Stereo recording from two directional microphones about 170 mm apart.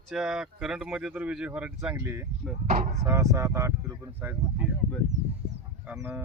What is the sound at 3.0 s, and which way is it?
Speech, 15° right (ahead or behind).